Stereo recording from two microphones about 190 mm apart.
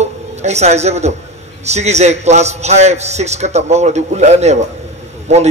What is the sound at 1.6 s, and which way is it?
A man's voice, 35° right (ahead or behind).